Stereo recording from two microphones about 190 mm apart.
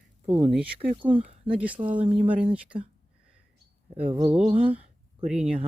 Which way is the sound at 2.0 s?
30° right (ahead or behind).